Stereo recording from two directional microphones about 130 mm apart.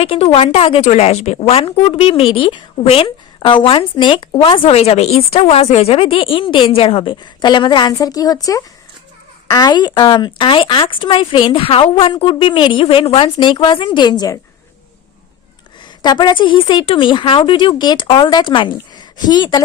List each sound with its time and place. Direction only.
0.0 s speech: 45° left (ahead or behind); by 8.4 s 30° left (ahead or behind)
9.5 s a woman's voice: 30° left (ahead or behind)
16.0 s a woman's voice: 35° left (ahead or behind)